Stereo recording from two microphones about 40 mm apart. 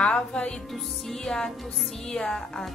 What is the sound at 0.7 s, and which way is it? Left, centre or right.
Music, centre.